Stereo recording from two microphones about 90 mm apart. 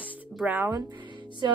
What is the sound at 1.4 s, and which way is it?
Music, 50° right (ahead or behind).